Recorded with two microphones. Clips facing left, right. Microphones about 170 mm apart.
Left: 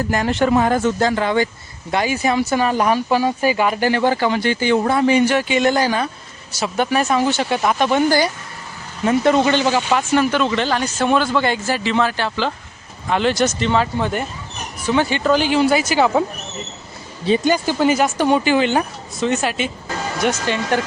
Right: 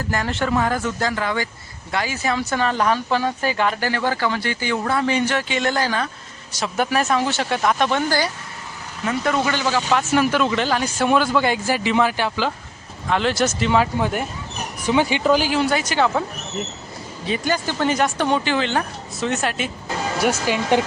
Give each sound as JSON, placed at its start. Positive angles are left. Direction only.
{"t": 0.0, "sound": "speech", "side_deg": 20}
{"t": 6.5, "sound": "speech", "side_deg": 5}
{"t": 9.0, "sound": "speech", "side_deg": 25}
{"t": 9.9, "sound": "speech", "side_deg": -5}
{"t": 13.1, "sound": "speech", "side_deg": 0}
{"t": 15.7, "sound": "speech", "side_deg": 5}
{"t": 17.2, "sound": "speech", "side_deg": 30}
{"t": 17.5, "sound": "speech", "side_deg": 10}
{"t": 19.2, "sound": "speech", "side_deg": 0}